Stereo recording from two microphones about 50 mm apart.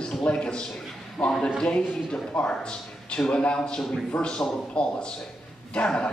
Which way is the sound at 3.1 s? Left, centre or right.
Centre.